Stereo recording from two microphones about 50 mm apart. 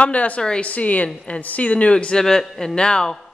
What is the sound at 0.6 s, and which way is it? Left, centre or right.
Speech, left.